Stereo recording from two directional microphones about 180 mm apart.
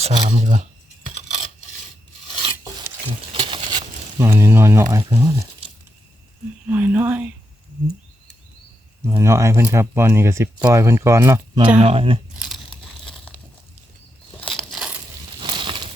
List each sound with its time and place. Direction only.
0.0 s speech: 40° right (ahead or behind)
2.4 s filing: 30° right (ahead or behind)
3.3 s a sound: 25° right (ahead or behind)
6.7 s speech: 10° right (ahead or behind)
9.0 s speech: 15° right (ahead or behind)
11.8 s speech: 30° right (ahead or behind)
12.4 s crumpling: centre (ahead or behind)
14.4 s a sound: centre (ahead or behind)
15.4 s a sound: 25° right (ahead or behind)